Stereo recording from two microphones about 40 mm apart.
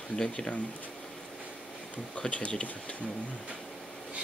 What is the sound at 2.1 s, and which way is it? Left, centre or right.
Speech, left.